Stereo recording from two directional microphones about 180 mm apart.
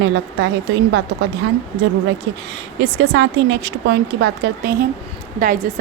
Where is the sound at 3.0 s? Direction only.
85° right; by 4.9 s 70° right (ahead or behind).